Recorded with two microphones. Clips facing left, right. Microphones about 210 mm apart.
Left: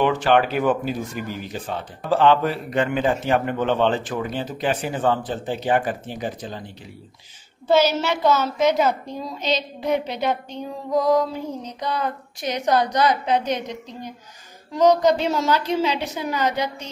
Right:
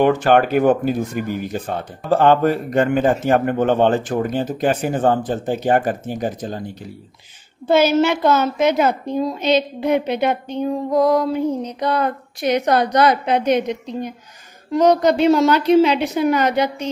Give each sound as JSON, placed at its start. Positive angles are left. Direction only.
{"t": 0.0, "sound": "speech", "side_deg": -45}
{"t": 7.6, "sound": "a woman's voice", "side_deg": -55}
{"t": 14.7, "sound": "a woman's voice", "side_deg": -60}